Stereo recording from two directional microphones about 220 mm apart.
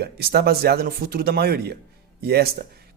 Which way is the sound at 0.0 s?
45° right (ahead or behind).